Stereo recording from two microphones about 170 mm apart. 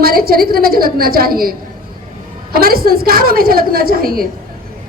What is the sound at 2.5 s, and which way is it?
A woman's voice, 60° right (ahead or behind).